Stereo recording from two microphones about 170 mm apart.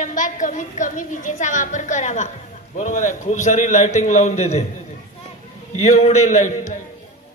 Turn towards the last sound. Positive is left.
turn(degrees=45)  # may be behind; listen again after turning